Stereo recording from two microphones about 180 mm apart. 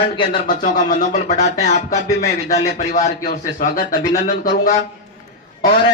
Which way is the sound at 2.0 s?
20° left (ahead or behind).